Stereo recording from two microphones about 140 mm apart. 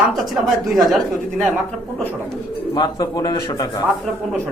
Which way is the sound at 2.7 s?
30° left (ahead or behind).